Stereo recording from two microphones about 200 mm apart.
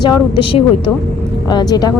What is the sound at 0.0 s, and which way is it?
A woman's voice, 25° left (ahead or behind).